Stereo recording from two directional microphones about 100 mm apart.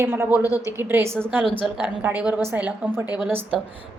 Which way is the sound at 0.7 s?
25° right (ahead or behind).